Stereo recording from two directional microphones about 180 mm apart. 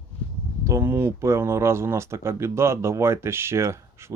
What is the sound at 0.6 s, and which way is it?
Speech, 15° right (ahead or behind).